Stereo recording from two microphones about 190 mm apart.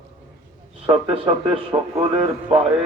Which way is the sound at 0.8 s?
30° right (ahead or behind).